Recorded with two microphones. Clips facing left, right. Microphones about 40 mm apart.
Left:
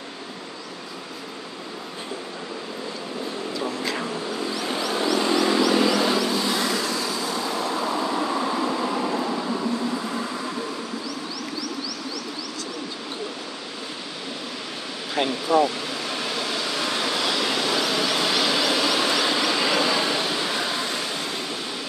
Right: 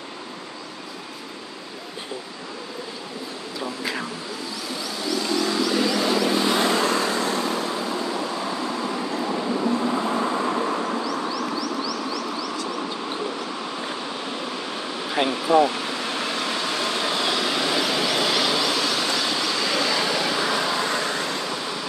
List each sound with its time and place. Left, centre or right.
4.9 s vehicle: left; by 5.9 s centre
5.9 s vehicle: centre
6.3 s vehicle: right
8.2 s vehicle: centre
9.2 s vehicle: centre
9.7 s vehicle: right
15.1 s a sound: centre
17.4 s a sound: centre
20.2 s vehicle: centre